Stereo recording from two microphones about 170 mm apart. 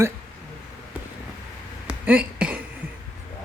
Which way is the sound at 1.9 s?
10° right (ahead or behind).